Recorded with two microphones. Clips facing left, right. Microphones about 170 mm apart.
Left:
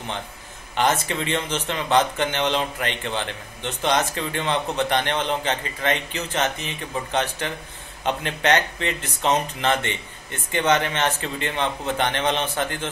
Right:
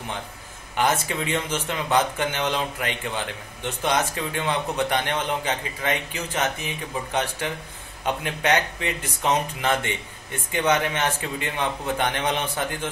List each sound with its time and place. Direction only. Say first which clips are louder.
0.7 s speech: left 1 dB; 10° right (ahead or behind)